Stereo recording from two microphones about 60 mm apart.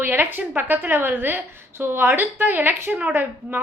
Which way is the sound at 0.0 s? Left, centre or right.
Right.